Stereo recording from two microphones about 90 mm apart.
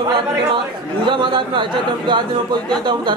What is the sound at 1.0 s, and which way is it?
A man's voice, 65° right (ahead or behind).